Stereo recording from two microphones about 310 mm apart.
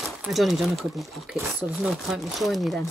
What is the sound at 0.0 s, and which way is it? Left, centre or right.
Speech, centre.